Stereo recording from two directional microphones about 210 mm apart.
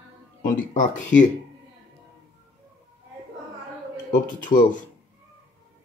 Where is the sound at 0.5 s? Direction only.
35° left (ahead or behind).